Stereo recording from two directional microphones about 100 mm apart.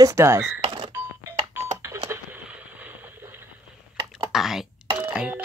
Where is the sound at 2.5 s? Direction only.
15° right (ahead or behind).